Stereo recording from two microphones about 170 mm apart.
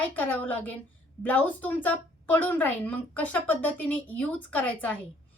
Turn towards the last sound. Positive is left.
turn(degrees=10)  # may be behind; listen again after turning